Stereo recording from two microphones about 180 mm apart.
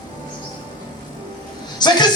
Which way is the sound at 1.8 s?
25° left (ahead or behind).